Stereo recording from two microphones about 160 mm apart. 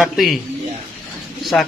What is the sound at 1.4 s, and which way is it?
Speech, centre (ahead or behind).